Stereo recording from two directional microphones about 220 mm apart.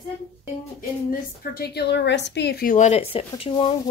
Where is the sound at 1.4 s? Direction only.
45° left (ahead or behind).